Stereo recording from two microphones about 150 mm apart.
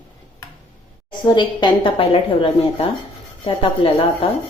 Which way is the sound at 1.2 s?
30° left (ahead or behind).